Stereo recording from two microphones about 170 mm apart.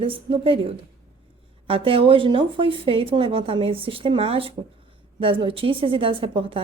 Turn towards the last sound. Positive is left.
turn(degrees=-35)  # may be behind; listen again after turning